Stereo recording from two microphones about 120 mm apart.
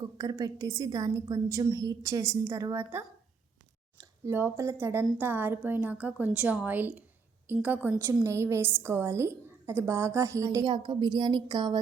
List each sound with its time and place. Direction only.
0.0 s a woman's voice: 30° right (ahead or behind)
4.2 s a woman's voice: 20° right (ahead or behind)
10.7 s a woman's voice: 40° right (ahead or behind)